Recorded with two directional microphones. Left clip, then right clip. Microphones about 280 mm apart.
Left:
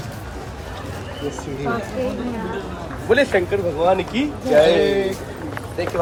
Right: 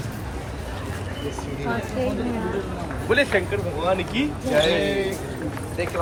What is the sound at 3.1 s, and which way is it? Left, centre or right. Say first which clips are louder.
A man's voice: left 4 dB; left.